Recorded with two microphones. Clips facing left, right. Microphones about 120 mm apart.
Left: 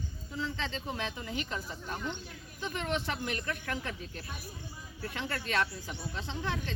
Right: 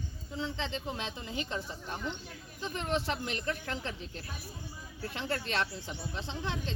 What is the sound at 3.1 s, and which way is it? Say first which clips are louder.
Speech: right 1 dB; 25° right (ahead or behind).